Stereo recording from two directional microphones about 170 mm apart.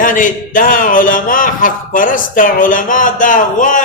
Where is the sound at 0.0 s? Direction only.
50° left (ahead or behind).